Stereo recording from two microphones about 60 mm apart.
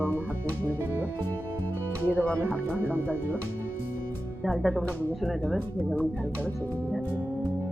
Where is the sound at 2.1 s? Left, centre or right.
Left.